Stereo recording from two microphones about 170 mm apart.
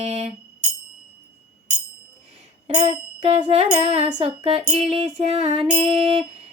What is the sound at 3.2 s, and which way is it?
Music, 35° right (ahead or behind).